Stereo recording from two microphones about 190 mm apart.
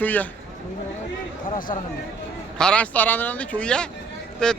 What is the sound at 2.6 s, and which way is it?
A man's voice, 5° left (ahead or behind).